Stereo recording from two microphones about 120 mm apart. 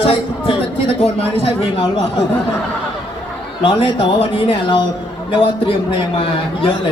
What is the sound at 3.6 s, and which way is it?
A man's voice, 50° left (ahead or behind).